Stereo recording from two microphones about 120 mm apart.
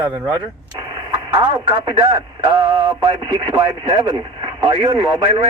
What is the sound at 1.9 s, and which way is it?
Speech, 35° right (ahead or behind).